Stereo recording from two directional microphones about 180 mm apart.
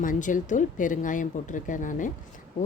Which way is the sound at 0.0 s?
45° left (ahead or behind).